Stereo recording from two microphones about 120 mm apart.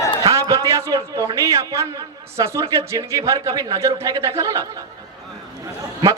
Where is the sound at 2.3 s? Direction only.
25° right (ahead or behind).